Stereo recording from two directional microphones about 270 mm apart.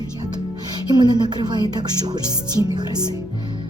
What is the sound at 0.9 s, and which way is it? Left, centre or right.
Speech, centre.